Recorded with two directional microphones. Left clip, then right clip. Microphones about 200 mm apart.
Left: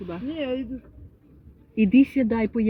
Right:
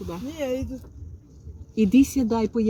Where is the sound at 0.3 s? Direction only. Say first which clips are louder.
Right 1 dB; 45° right (ahead or behind).